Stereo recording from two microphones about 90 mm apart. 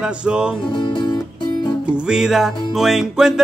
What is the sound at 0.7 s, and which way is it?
Music, 55° left (ahead or behind).